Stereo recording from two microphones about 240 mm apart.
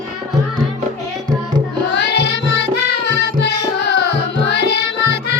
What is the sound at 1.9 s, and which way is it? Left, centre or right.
Music, left.